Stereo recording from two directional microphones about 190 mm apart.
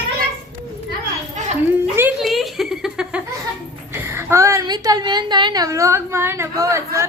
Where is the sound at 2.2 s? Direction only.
Centre (ahead or behind).